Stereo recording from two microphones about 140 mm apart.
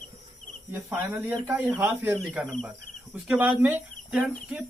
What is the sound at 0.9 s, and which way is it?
Speech, 15° right (ahead or behind).